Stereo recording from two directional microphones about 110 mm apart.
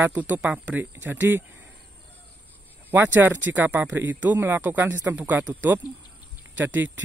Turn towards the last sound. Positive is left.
turn(degrees=-15)  # may be behind; listen again after turning